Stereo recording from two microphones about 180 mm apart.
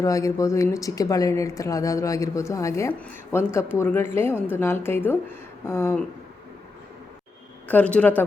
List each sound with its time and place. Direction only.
0.0 s a woman's voice: 20° left (ahead or behind)
7.7 s a woman's voice: 5° left (ahead or behind)